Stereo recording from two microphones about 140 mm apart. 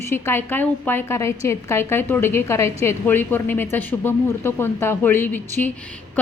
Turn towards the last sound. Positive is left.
turn(degrees=10)  # may be behind; listen again after turning